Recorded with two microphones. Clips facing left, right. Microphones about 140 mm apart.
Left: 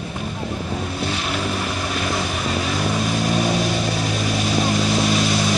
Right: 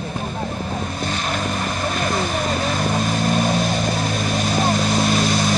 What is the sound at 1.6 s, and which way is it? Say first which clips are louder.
Vehicle: right 2 dB; 40° right (ahead or behind).